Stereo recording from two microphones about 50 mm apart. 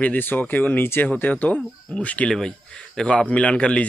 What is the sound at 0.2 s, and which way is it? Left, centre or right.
Speech, left.